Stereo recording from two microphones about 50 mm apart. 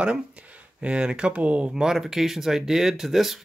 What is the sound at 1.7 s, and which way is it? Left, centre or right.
Speech, centre.